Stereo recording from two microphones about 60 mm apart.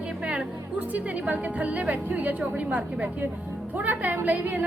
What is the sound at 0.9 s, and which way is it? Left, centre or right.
A woman's voice, right.